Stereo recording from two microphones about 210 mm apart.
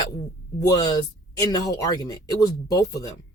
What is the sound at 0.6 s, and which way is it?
Speech, 20° left (ahead or behind).